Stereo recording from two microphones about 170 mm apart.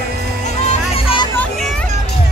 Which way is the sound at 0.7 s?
35° left (ahead or behind).